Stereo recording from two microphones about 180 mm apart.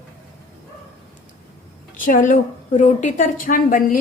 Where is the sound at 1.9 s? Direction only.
45° left (ahead or behind).